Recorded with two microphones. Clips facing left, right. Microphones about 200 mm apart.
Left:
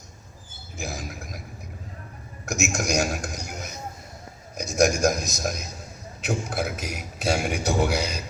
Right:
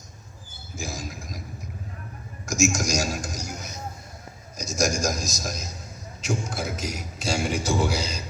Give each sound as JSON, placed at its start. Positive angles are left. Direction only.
{"t": 0.8, "sound": "a sound", "side_deg": 60}
{"t": 2.5, "sound": "a man's voice", "side_deg": 60}
{"t": 4.5, "sound": "a man's voice", "side_deg": 60}